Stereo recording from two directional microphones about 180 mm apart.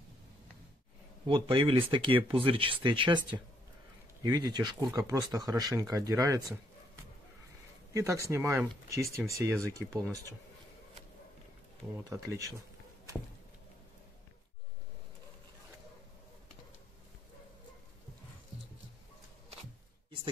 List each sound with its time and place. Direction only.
1.2 s speech: 30° right (ahead or behind)
4.2 s speech: 25° right (ahead or behind)
7.9 s speech: 15° right (ahead or behind)
12.1 s speech: 15° right (ahead or behind)